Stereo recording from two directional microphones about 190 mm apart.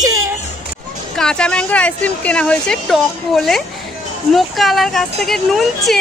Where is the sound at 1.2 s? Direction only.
5° left (ahead or behind).